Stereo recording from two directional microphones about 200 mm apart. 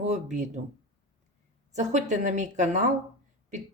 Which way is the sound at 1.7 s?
35° right (ahead or behind).